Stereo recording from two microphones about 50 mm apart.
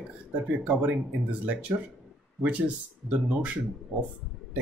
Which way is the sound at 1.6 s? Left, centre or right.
Right.